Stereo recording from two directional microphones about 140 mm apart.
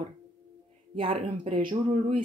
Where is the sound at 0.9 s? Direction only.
40° right (ahead or behind).